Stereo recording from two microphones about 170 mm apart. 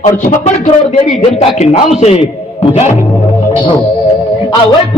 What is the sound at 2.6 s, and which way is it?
Music, 40° left (ahead or behind).